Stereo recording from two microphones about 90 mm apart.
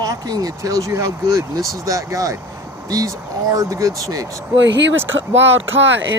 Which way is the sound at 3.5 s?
40° right (ahead or behind).